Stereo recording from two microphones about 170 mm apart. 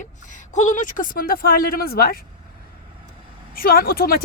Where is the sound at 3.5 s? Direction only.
60° left (ahead or behind).